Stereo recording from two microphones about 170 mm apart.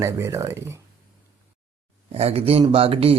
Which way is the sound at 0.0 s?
15° right (ahead or behind).